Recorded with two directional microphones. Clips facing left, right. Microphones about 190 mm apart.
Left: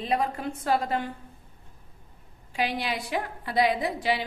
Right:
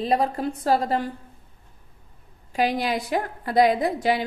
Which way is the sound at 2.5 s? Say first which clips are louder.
Right 6 dB; 40° right (ahead or behind).